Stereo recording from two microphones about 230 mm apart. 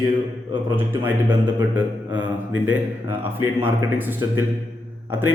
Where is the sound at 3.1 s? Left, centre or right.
Right.